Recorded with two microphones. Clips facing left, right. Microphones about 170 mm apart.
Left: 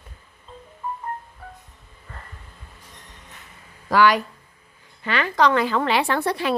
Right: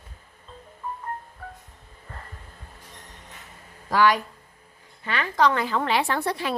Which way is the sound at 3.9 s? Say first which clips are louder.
Left 3 dB; 85° left.